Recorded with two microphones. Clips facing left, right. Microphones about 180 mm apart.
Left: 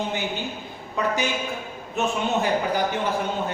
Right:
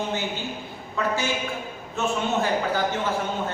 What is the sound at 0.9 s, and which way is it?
A man's voice, 15° left (ahead or behind).